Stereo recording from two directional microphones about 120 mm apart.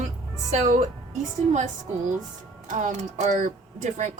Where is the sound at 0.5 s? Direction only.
75° right (ahead or behind).